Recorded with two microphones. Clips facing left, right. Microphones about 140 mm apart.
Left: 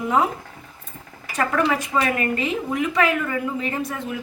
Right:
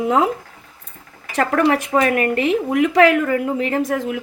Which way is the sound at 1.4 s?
65° right (ahead or behind).